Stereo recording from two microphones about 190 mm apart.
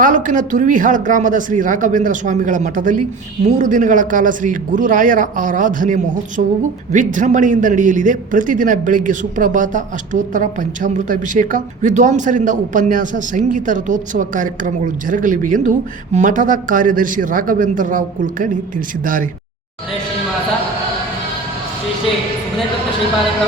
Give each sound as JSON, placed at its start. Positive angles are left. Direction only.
{"t": 0.0, "sound": "a man's voice", "side_deg": -40}